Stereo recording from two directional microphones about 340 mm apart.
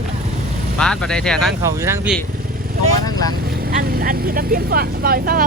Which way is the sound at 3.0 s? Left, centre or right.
Centre.